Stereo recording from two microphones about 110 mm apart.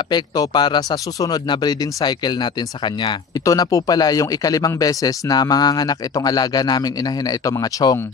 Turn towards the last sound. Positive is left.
turn(degrees=35)  # may be behind; listen again after turning